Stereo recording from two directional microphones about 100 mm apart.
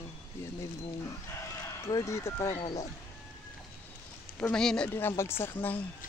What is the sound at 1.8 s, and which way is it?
Speech, 30° left (ahead or behind).